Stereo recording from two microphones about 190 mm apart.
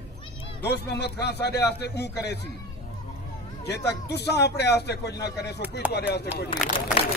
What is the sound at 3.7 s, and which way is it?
Speech, 60° left (ahead or behind).